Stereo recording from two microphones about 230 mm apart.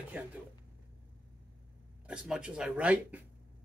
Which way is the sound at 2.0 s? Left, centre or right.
Centre.